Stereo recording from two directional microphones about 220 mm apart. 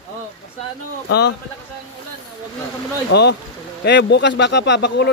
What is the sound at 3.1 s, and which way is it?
Speech, 50° left (ahead or behind).